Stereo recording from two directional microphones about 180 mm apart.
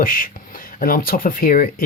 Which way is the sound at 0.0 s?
50° left (ahead or behind).